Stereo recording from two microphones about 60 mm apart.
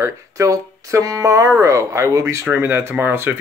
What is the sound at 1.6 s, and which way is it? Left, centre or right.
Speech, right.